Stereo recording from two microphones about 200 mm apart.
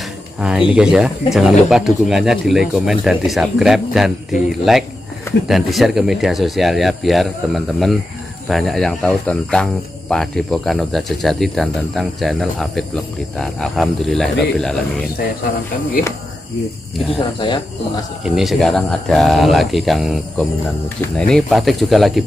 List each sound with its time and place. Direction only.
0.4 s speech: 5° right (ahead or behind)
17.4 s speech: 25° left (ahead or behind)
18.2 s speech: centre (ahead or behind)